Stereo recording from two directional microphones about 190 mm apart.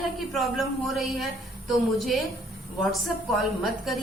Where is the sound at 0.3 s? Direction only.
Centre (ahead or behind).